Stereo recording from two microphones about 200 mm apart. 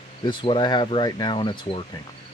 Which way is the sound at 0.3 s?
25° left (ahead or behind).